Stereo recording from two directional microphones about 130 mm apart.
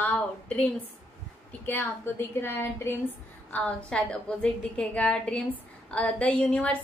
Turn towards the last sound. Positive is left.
turn(degrees=10)  # may be behind; listen again after turning